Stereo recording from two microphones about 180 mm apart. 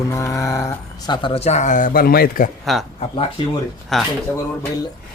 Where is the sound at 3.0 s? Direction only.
30° left (ahead or behind).